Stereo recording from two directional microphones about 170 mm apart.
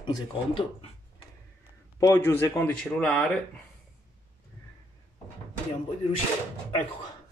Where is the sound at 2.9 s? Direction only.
Centre (ahead or behind).